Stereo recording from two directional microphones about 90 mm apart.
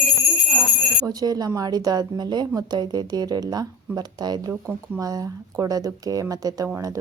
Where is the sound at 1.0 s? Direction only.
45° right (ahead or behind).